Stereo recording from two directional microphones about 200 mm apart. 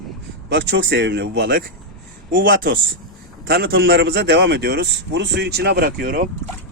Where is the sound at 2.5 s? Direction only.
45° right (ahead or behind).